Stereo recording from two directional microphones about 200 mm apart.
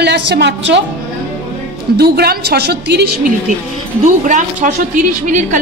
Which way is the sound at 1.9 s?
55° right (ahead or behind).